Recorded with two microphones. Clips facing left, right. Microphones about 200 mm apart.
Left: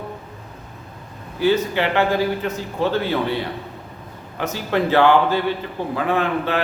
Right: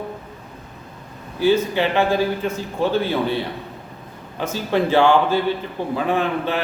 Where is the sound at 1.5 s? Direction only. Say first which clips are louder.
Right 1 dB; 15° right (ahead or behind).